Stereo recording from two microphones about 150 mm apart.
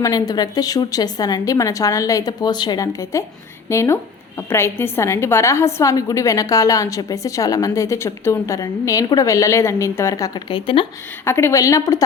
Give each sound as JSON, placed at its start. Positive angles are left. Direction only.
{"t": 0.0, "sound": "a woman's voice", "side_deg": 25}
{"t": 11.3, "sound": "a woman's voice", "side_deg": 15}